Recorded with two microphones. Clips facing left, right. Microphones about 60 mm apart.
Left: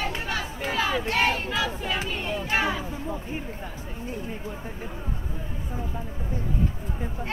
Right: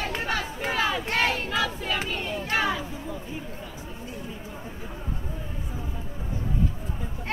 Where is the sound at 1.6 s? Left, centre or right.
Left.